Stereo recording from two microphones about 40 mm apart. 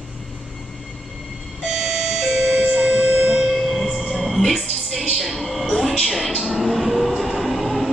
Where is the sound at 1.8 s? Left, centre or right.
Centre.